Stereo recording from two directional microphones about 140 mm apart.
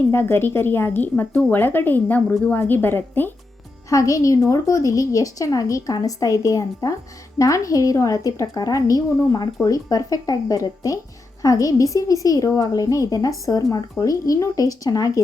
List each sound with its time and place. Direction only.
0.1 s a woman's voice: 15° left (ahead or behind)